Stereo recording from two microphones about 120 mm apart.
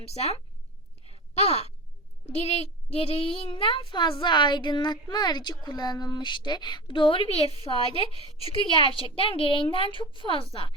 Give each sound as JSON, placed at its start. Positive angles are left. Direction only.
{"t": 0.0, "sound": "a woman's voice", "side_deg": 60}
{"t": 7.3, "sound": "a woman's voice", "side_deg": 55}